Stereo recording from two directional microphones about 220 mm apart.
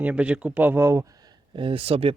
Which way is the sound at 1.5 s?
25° right (ahead or behind).